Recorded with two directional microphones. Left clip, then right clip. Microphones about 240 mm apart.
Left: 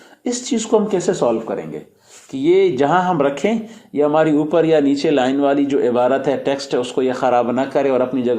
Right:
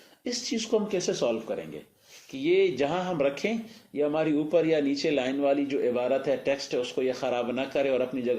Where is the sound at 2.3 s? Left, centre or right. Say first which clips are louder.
Left 10 dB; left.